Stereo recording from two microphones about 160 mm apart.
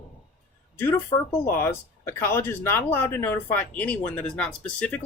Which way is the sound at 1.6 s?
15° left (ahead or behind).